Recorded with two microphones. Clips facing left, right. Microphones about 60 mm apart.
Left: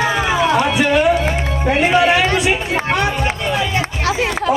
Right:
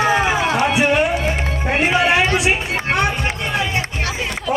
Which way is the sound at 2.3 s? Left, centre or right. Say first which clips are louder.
Left 2 dB; centre.